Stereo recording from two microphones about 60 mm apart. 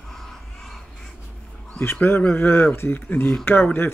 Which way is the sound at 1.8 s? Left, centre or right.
Left.